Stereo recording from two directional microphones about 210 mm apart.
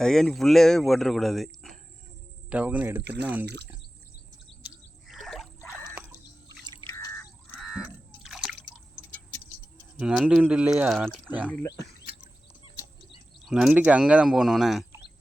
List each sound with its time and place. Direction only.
0.0 s speech: 5° left (ahead or behind)
2.5 s speech: 5° right (ahead or behind)
3.0 s speech: 55° right (ahead or behind)
4.4 s bird: centre (ahead or behind)
5.2 s a sound: centre (ahead or behind)
5.9 s a sound: 10° right (ahead or behind)
7.5 s crow: centre (ahead or behind)
10.0 s speech: 5° right (ahead or behind)
11.5 s speech: 15° left (ahead or behind)
12.6 s a sound: 25° left (ahead or behind)
13.4 s speech: 5° right (ahead or behind)